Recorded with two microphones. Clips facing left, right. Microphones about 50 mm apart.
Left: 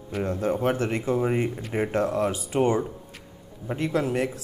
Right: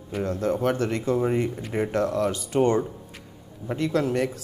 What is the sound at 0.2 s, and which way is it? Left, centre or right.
Speech, centre.